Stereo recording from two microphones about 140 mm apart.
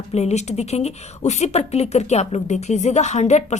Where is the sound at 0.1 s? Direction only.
50° left (ahead or behind).